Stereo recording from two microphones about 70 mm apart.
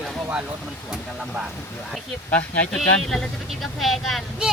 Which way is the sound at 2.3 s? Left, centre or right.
Left.